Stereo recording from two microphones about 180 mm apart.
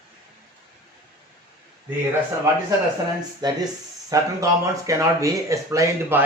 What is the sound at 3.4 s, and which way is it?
Speech, 25° right (ahead or behind).